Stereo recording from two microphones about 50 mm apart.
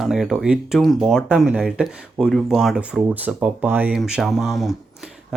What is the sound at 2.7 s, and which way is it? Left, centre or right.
Speech, centre.